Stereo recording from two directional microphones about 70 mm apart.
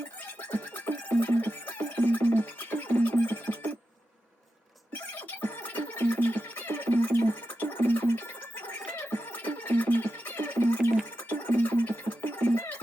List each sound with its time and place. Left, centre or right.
0.4 s music: left
4.9 s music: left